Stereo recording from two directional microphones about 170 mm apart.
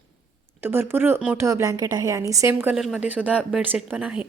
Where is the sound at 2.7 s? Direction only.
5° right (ahead or behind).